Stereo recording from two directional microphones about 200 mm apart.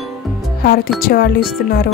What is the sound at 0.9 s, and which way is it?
Speech, 45° left (ahead or behind).